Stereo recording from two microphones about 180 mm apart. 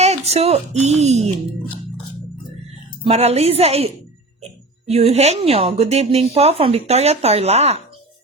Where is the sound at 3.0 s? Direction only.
35° right (ahead or behind).